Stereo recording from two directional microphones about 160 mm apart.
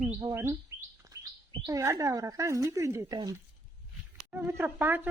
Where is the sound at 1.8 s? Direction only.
20° right (ahead or behind).